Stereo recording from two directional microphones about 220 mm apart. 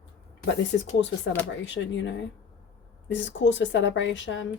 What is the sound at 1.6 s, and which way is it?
A woman's voice, 55° left (ahead or behind).